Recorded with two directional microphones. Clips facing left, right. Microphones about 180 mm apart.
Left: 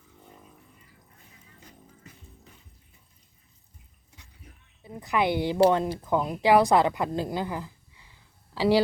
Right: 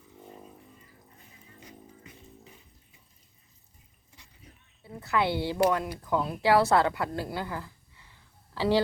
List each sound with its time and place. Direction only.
4.8 s a woman's voice: 15° left (ahead or behind)
5.5 s a woman's voice: 30° left (ahead or behind); by 8.8 s 15° left (ahead or behind)